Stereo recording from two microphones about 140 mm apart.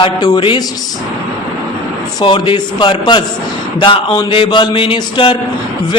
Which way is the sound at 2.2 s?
35° left (ahead or behind).